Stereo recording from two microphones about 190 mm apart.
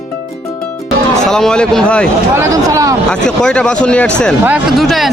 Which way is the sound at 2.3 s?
15° right (ahead or behind).